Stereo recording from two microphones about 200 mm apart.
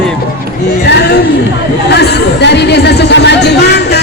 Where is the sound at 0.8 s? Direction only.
55° left (ahead or behind).